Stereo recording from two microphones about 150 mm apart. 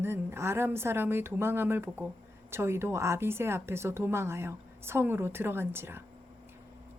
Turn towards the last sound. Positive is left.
turn(degrees=-15)  # may be behind; listen again after turning